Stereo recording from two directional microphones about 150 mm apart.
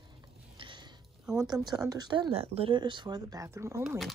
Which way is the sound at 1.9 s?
30° right (ahead or behind).